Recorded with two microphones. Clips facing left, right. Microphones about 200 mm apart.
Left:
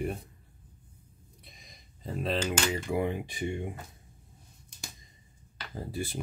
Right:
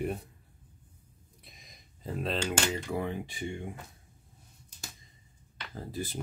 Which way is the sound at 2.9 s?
15° left (ahead or behind).